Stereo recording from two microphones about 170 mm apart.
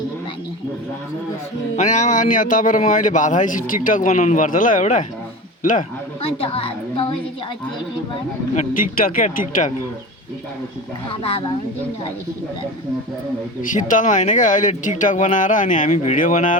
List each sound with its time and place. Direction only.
1.7 s speech: 45° left (ahead or behind)
6.2 s a woman's voice: 35° left (ahead or behind)
9.0 s speech: 55° left (ahead or behind)
11.1 s a woman's voice: 35° left (ahead or behind)
13.6 s speech: 50° left (ahead or behind)